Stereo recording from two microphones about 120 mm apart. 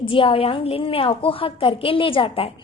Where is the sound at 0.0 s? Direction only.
45° left (ahead or behind).